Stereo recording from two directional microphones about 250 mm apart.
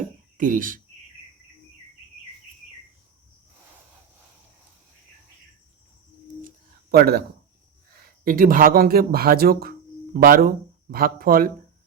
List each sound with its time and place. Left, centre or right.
0.3 s speech: right
6.9 s speech: right